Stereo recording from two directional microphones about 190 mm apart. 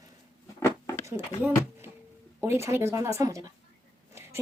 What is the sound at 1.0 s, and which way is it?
A woman's voice, 10° right (ahead or behind).